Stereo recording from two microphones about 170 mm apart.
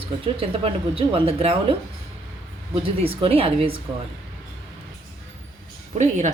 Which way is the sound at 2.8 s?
35° right (ahead or behind).